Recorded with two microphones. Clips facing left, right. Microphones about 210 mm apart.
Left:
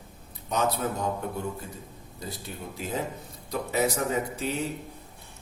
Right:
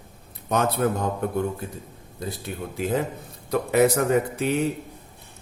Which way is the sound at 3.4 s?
60° right (ahead or behind).